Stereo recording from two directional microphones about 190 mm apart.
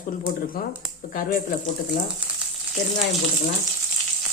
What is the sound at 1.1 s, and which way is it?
Speech, 45° left (ahead or behind).